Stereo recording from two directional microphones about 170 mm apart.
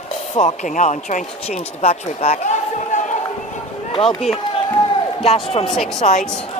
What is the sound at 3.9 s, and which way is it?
Run, 30° left (ahead or behind).